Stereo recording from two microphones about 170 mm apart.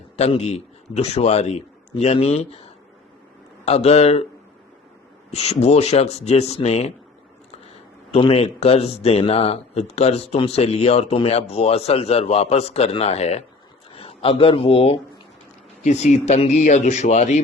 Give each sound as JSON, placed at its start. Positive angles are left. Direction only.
{"t": 0.2, "sound": "speech", "side_deg": 40}
{"t": 3.7, "sound": "speech", "side_deg": 40}
{"t": 5.3, "sound": "speech", "side_deg": 40}
{"t": 8.1, "sound": "a man's voice", "side_deg": 35}